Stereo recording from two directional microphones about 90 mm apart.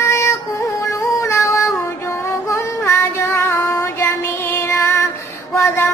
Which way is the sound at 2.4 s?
30° left (ahead or behind).